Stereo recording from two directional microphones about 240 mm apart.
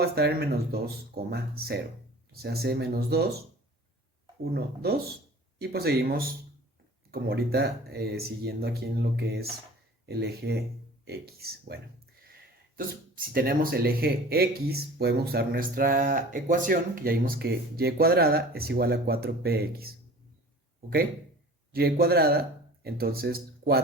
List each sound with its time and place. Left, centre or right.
0.0 s speech: right
4.5 s speech: right
21.7 s speech: right